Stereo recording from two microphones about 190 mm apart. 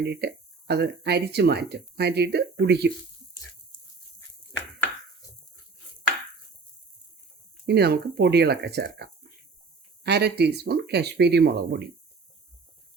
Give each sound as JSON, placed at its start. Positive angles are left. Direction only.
{"t": 0.0, "sound": "speech", "side_deg": -60}
{"t": 7.7, "sound": "speech", "side_deg": -60}